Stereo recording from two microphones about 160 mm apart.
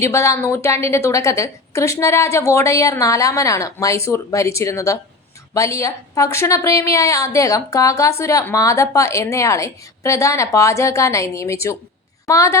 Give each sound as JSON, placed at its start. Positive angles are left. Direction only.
{"t": 0.0, "sound": "a woman's voice", "side_deg": 15}